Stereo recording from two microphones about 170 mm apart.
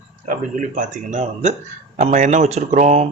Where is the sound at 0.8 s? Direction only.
45° right (ahead or behind).